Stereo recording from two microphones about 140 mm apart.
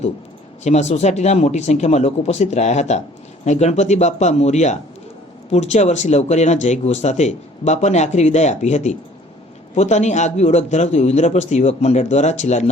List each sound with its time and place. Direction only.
0.6 s a man's voice: 55° left (ahead or behind)